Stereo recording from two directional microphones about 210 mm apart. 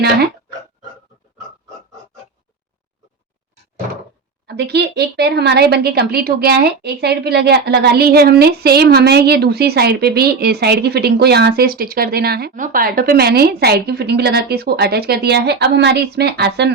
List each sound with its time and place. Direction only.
4.4 s speech: 50° right (ahead or behind)